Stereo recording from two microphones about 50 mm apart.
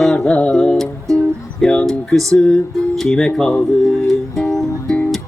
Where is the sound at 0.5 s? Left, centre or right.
Centre.